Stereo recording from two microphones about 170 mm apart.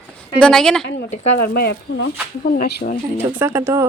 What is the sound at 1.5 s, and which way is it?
Speech, 70° left (ahead or behind).